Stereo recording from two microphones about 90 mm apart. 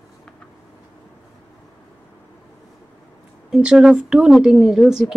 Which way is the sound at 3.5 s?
5° right (ahead or behind).